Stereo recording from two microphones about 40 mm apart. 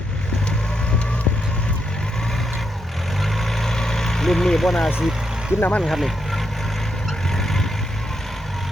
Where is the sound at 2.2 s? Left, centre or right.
Centre.